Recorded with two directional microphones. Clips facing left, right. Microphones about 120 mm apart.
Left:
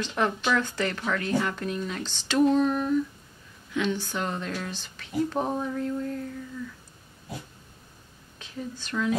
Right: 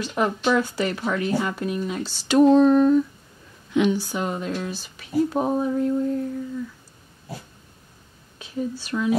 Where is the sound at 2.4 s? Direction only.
35° right (ahead or behind).